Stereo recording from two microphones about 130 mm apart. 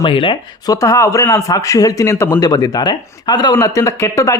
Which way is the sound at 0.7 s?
25° left (ahead or behind).